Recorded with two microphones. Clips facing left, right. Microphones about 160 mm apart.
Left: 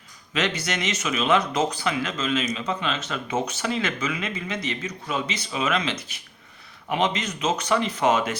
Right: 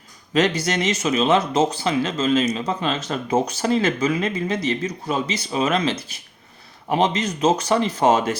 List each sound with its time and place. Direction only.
0.3 s speech: 35° right (ahead or behind)